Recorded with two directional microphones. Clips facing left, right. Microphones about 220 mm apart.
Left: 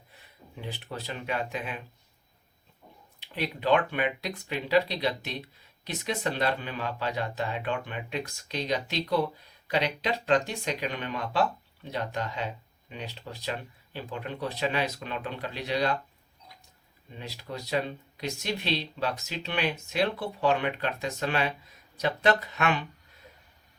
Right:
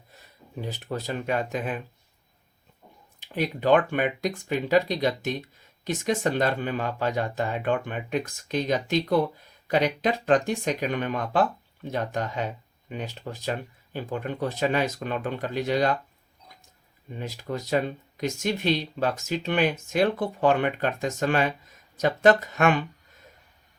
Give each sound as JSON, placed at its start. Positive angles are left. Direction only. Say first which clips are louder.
{"t": 0.1, "sound": "speech", "louder": "right 7 dB", "side_deg": -40}
{"t": 3.2, "sound": "speech", "louder": "right 5 dB", "side_deg": -45}
{"t": 17.2, "sound": "speech", "louder": "right 6 dB", "side_deg": -45}